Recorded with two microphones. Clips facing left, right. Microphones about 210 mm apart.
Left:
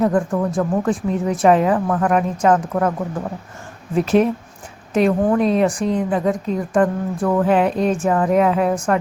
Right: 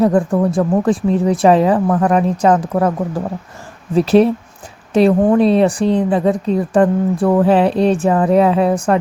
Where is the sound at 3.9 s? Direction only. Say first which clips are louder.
Right 5 dB; 35° right (ahead or behind).